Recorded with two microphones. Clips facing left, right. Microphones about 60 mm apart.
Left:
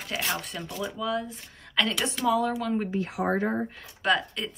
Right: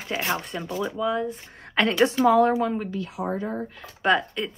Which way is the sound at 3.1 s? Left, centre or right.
Left.